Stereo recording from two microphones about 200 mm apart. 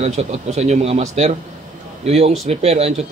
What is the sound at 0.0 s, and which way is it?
Speech, 35° right (ahead or behind).